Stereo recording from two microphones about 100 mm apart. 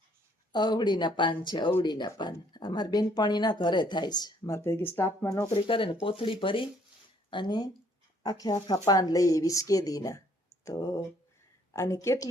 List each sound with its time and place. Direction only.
0.5 s speech: 45° left (ahead or behind)
4.5 s speech: 25° left (ahead or behind)
5.5 s a woman's voice: 60° left (ahead or behind); by 12.3 s 30° left (ahead or behind)